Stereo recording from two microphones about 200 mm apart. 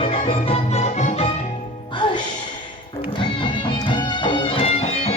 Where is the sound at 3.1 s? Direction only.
25° left (ahead or behind).